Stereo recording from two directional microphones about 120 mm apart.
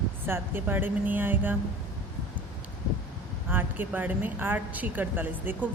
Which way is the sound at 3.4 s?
15° right (ahead or behind).